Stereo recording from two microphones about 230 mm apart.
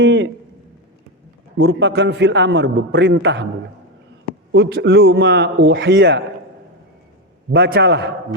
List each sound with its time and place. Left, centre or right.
0.0 s speech: right
1.5 s a man's voice: right
4.5 s a man's voice: right
7.5 s a man's voice: right